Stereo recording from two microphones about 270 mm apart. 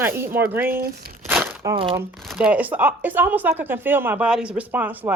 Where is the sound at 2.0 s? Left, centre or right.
Centre.